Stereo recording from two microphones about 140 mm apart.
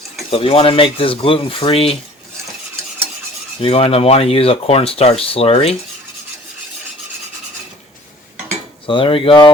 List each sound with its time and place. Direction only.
0.3 s speech: 45° left (ahead or behind)
3.6 s speech: 45° left (ahead or behind)
8.9 s speech: 40° left (ahead or behind)